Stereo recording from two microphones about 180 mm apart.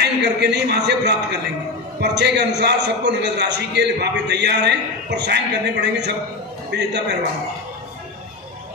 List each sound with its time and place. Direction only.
0.0 s a man's voice: 70° right (ahead or behind)